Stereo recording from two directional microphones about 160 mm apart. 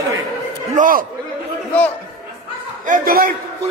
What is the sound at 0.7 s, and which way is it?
Speech, 60° right (ahead or behind).